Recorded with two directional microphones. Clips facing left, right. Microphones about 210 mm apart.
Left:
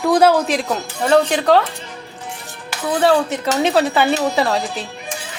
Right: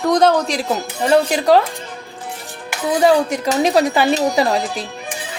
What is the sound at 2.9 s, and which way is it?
Dishes, 15° right (ahead or behind).